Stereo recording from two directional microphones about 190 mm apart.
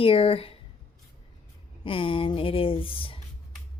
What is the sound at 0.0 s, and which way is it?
Speech, 30° left (ahead or behind).